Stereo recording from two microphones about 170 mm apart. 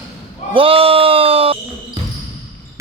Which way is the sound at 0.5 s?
30° right (ahead or behind).